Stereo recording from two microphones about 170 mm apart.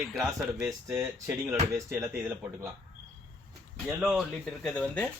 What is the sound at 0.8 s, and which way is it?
Speech, 15° right (ahead or behind).